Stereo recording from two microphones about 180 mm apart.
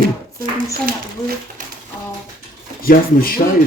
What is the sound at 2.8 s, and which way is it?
Speech, 55° left (ahead or behind).